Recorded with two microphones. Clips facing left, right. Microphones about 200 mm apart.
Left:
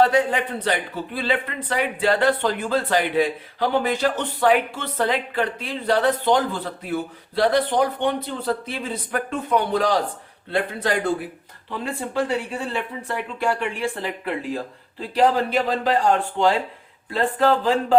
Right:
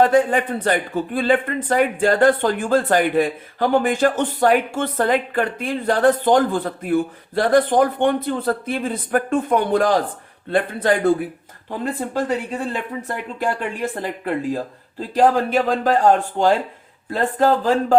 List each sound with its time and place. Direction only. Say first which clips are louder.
0.0 s speech: right 3 dB; 50° right (ahead or behind)